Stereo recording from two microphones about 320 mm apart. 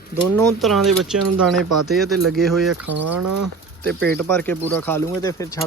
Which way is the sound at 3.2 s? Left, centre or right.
Right.